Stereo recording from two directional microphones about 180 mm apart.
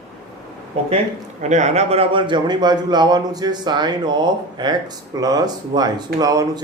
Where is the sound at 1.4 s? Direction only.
40° right (ahead or behind).